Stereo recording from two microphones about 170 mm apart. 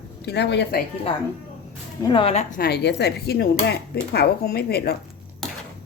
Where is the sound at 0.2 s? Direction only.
80° left.